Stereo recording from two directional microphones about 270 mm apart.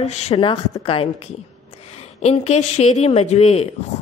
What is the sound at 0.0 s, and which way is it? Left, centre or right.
A woman's voice, left.